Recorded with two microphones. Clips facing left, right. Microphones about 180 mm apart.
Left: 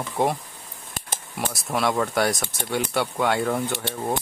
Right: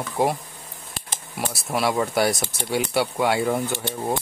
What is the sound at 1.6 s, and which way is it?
Speech, 5° right (ahead or behind).